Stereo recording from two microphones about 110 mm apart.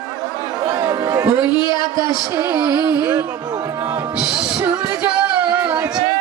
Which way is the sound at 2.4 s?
35° right (ahead or behind).